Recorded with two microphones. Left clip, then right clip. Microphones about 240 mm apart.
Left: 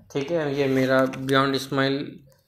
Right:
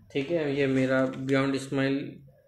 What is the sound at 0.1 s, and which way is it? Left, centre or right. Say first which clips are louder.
Speech: left 3 dB; left.